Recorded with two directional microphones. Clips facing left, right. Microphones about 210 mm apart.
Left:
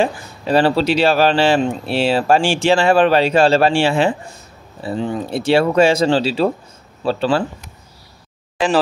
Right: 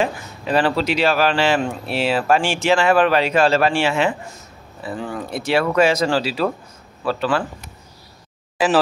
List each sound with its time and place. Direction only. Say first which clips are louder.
0.0 s a man's voice: left 3 dB; 30° left (ahead or behind)
8.6 s speech: left 1 dB; 5° right (ahead or behind)